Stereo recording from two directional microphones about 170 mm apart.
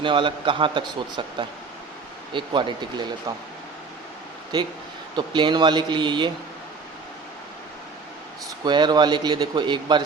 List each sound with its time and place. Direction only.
0.0 s a man's voice: 30° right (ahead or behind)
5.1 s a man's voice: 25° right (ahead or behind)
8.6 s a man's voice: 25° right (ahead or behind)